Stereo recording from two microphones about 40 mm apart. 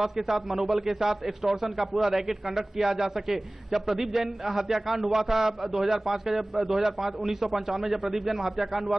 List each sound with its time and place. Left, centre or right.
0.0 s a man's voice: centre